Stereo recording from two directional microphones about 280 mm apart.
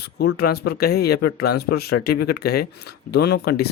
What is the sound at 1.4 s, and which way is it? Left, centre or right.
Speech, left.